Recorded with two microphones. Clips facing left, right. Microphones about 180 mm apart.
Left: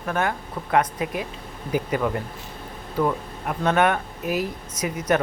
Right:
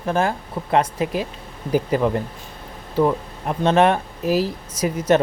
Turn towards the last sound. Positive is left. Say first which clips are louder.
# right 5 dB
turn(degrees=-25)  # may be behind; listen again after turning